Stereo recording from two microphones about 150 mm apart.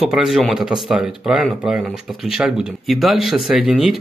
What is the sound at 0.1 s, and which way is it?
Speech, centre (ahead or behind).